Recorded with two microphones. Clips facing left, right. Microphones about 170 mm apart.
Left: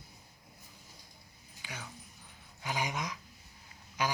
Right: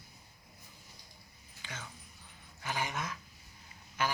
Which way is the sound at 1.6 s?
10° left (ahead or behind).